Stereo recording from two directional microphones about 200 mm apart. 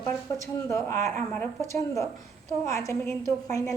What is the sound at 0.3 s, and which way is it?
A woman's voice, 15° left (ahead or behind).